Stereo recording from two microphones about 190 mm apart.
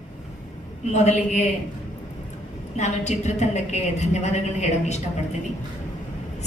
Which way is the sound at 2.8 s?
35° left (ahead or behind).